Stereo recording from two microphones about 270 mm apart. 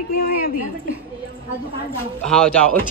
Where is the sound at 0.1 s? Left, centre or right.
Left.